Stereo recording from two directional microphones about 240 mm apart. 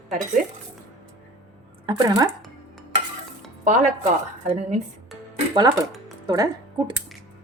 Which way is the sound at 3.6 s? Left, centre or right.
Right.